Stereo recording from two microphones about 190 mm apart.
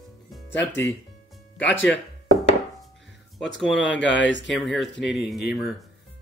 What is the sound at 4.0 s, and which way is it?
Speech, 70° left (ahead or behind).